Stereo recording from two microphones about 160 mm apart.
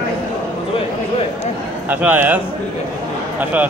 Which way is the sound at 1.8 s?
10° right (ahead or behind).